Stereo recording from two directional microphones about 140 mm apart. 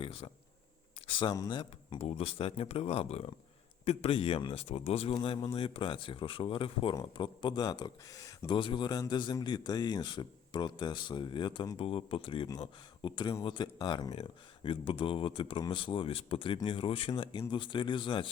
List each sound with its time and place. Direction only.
0.0 s a sound: 45° left (ahead or behind)
1.3 s speech: 30° left (ahead or behind)
2.0 s speech: 45° left (ahead or behind); by 11.8 s 30° left (ahead or behind)
11.8 s speech: 40° left (ahead or behind)